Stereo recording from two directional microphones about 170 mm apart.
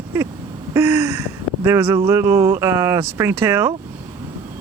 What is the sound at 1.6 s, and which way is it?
Speech, 15° right (ahead or behind).